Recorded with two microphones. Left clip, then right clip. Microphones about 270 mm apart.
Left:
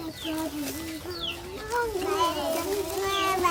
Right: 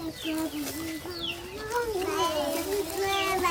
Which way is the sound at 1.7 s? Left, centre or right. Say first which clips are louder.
Left 2 dB; centre.